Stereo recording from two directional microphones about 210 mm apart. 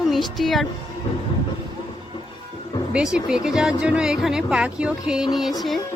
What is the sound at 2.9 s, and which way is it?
A woman's voice, 5° right (ahead or behind).